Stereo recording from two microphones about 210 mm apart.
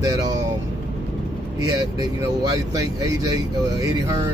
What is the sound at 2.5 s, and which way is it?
Speech, 15° right (ahead or behind).